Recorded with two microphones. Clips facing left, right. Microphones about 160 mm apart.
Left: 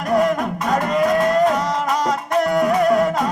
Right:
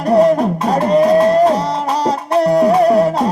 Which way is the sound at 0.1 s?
35° right (ahead or behind).